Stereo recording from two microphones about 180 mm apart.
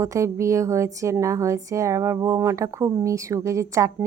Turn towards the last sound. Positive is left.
turn(degrees=-15)  # may be behind; listen again after turning